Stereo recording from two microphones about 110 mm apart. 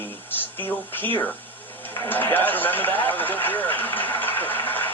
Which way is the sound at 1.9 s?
20° left (ahead or behind).